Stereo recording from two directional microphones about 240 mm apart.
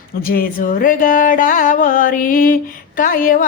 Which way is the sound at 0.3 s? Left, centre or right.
Left.